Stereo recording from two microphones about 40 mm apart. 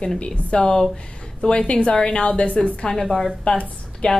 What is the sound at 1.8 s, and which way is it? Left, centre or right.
A woman's voice, left.